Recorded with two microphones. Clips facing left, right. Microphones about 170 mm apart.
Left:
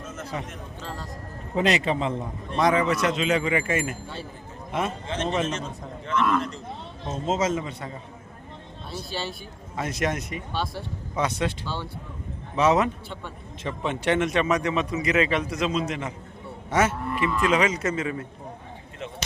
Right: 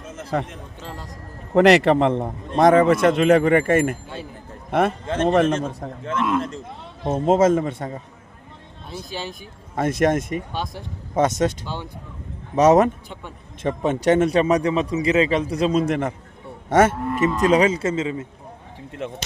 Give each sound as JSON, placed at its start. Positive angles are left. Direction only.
{"t": 0.3, "sound": "a man's voice", "side_deg": -60}
{"t": 1.5, "sound": "a man's voice", "side_deg": -70}
{"t": 8.9, "sound": "speech", "side_deg": -15}
{"t": 9.7, "sound": "a man's voice", "side_deg": -50}
{"t": 10.5, "sound": "speech", "side_deg": -15}
{"t": 11.1, "sound": "a man's voice", "side_deg": -45}
{"t": 11.6, "sound": "speech", "side_deg": -15}
{"t": 12.5, "sound": "a man's voice", "side_deg": -45}
{"t": 13.7, "sound": "cattle", "side_deg": -45}